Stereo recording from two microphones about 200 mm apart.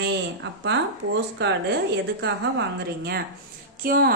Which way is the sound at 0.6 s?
60° right (ahead or behind).